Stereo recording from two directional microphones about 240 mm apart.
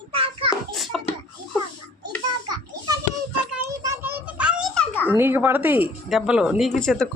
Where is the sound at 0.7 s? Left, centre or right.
Centre.